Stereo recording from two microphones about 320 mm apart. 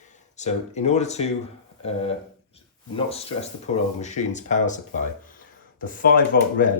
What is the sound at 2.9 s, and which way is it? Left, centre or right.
Speech, centre.